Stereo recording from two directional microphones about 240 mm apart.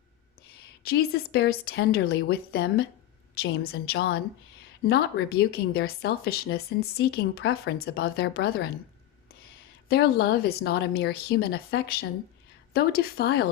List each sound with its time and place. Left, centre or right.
0.8 s a woman's voice: left
9.9 s speech: left